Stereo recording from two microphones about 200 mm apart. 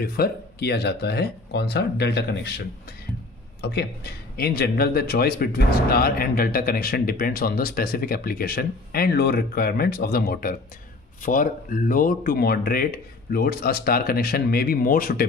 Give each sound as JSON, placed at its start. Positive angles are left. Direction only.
{"t": 0.0, "sound": "speech", "side_deg": 50}
{"t": 3.6, "sound": "speech", "side_deg": 55}